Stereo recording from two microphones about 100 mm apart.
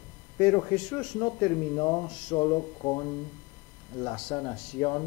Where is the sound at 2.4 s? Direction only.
30° left (ahead or behind).